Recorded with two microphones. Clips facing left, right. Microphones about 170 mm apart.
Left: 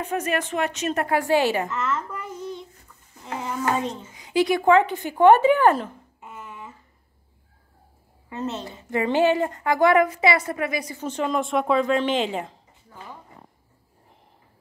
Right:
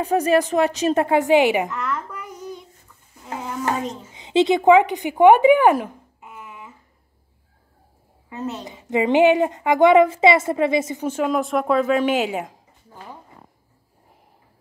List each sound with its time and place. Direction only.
0.0 s a woman's voice: 35° right (ahead or behind); by 1.7 s 15° right (ahead or behind)
1.7 s a child's voice: centre (ahead or behind)
3.2 s a sound: centre (ahead or behind)
3.7 s a child's voice: centre (ahead or behind)
4.1 s speech: 25° right (ahead or behind)
6.3 s a sound: centre (ahead or behind)
8.3 s a woman's voice: 10° right (ahead or behind)
11.1 s a woman's voice: 5° right (ahead or behind)